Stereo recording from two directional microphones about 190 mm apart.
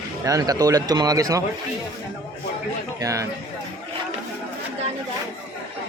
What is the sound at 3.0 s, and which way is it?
Speech, 15° right (ahead or behind).